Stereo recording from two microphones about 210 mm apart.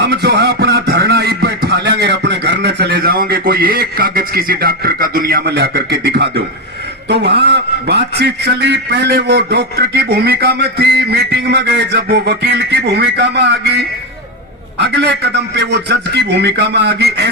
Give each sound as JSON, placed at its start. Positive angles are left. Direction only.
{"t": 0.0, "sound": "a man's voice", "side_deg": -50}